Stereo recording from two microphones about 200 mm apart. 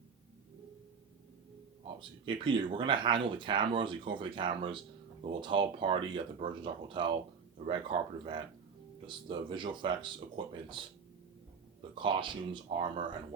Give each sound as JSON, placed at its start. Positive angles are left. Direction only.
{"t": 2.0, "sound": "speech", "side_deg": -25}
{"t": 11.9, "sound": "speech", "side_deg": -25}